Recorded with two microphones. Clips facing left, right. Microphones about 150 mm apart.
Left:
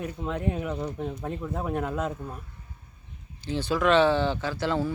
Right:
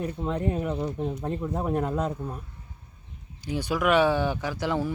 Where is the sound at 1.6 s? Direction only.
Centre (ahead or behind).